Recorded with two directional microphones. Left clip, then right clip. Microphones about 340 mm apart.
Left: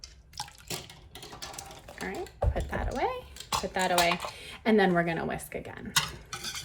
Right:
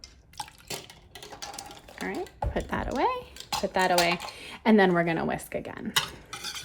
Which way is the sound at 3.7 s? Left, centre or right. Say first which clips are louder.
Right 2 dB; right.